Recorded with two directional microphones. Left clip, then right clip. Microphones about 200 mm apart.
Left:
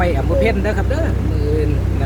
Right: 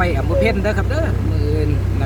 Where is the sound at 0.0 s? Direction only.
40° right (ahead or behind).